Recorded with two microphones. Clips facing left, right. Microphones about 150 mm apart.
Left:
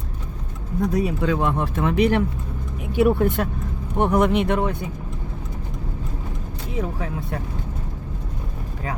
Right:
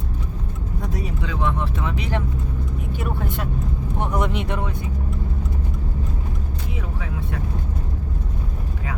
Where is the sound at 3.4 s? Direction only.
50° left (ahead or behind).